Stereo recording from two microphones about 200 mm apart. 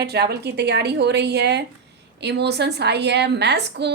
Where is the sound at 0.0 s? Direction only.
55° right (ahead or behind).